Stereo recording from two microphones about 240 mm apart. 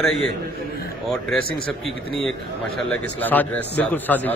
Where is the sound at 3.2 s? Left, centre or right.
Centre.